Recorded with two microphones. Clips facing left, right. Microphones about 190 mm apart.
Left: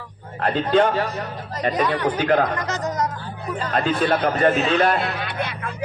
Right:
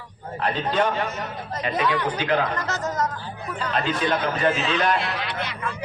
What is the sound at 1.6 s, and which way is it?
Speech, 40° left (ahead or behind).